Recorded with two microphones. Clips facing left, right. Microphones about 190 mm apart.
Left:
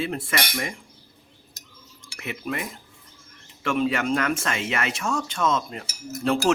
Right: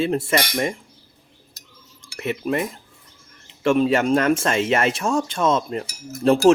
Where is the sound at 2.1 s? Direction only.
35° right (ahead or behind).